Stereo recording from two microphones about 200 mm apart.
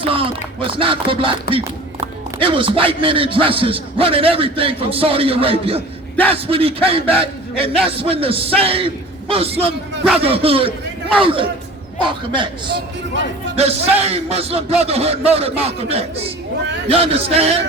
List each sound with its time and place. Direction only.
0.0 s a man's voice: 25° right (ahead or behind)